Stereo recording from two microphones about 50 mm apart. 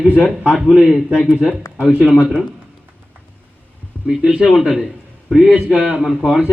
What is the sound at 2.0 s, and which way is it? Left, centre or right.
Speech, centre.